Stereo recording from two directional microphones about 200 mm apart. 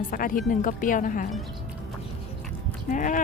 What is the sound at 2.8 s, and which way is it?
Speech, 40° left (ahead or behind).